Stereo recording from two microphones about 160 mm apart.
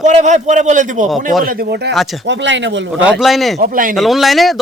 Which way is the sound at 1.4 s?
65° right (ahead or behind).